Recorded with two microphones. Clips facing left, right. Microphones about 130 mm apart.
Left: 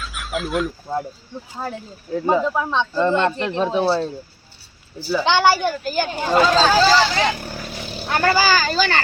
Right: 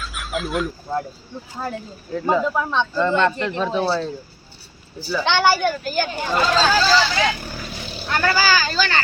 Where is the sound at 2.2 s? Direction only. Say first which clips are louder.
Left 1 dB; 20° left (ahead or behind).